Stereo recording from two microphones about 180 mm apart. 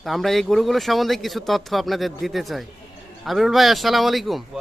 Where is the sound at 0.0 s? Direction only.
Centre (ahead or behind).